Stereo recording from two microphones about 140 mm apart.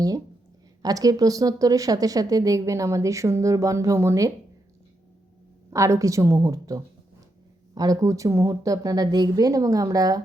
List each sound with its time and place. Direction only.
0.8 s speech: 25° right (ahead or behind)
5.7 s speech: 20° right (ahead or behind)